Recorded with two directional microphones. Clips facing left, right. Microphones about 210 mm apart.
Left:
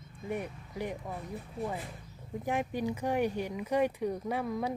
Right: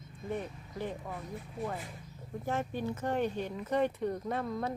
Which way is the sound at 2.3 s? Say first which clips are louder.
Left 2 dB; 15° left (ahead or behind).